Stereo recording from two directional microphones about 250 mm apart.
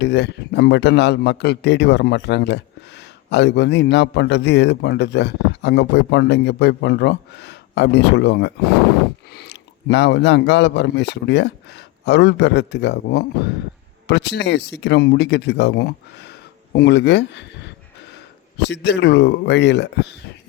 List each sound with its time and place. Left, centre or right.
0.0 s a man's voice: left